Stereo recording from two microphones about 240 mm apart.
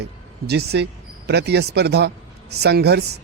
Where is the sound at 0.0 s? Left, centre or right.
Right.